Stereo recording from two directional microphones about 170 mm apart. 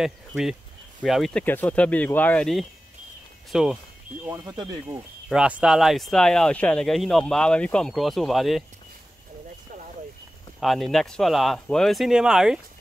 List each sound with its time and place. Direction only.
0.0 s speech: 5° right (ahead or behind)
1.4 s speech: 10° left (ahead or behind)
4.5 s speech: 20° right (ahead or behind)
5.3 s speech: 5° right (ahead or behind)
10.6 s speech: centre (ahead or behind)